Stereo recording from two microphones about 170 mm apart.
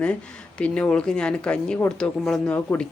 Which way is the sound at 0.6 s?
5° left (ahead or behind).